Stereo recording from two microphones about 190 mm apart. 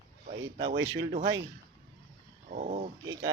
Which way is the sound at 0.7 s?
80° right.